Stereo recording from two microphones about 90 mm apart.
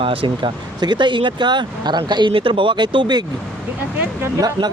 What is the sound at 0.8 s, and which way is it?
Speech, 55° right (ahead or behind).